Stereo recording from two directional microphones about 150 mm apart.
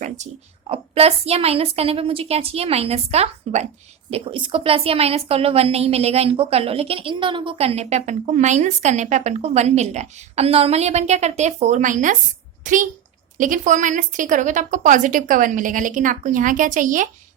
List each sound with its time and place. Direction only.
0.7 s a woman's voice: 40° right (ahead or behind)
4.1 s a woman's voice: 35° right (ahead or behind); by 17.1 s 60° right (ahead or behind)